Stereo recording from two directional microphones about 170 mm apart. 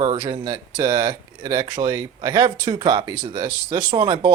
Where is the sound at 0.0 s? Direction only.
30° right (ahead or behind).